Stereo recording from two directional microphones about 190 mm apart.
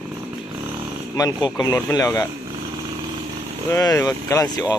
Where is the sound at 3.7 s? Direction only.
15° left (ahead or behind).